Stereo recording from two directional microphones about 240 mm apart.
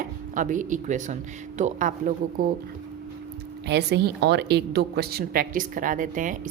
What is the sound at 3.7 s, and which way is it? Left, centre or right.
A woman's voice, right.